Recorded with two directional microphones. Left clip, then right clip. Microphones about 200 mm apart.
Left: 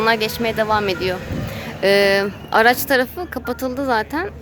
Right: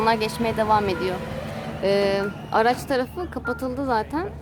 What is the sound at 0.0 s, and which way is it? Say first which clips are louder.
Speech: left 4 dB; centre (ahead or behind).